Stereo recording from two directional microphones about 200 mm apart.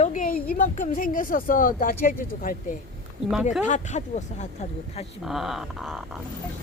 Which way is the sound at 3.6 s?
35° left (ahead or behind).